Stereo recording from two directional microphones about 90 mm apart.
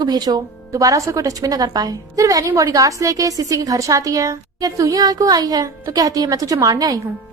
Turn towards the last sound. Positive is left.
turn(degrees=-45)  # may be behind; listen again after turning